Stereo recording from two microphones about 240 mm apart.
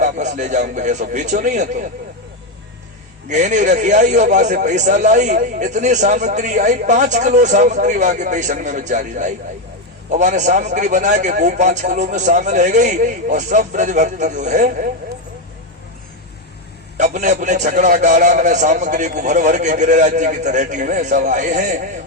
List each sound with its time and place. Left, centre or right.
0.0 s a man's voice: right
3.2 s a man's voice: right
17.0 s a man's voice: right